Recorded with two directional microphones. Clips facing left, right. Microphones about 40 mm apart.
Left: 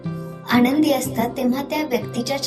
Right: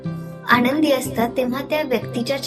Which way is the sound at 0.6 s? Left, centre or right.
Right.